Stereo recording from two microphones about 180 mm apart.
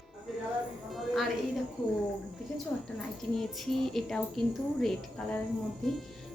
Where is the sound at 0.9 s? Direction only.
Centre (ahead or behind).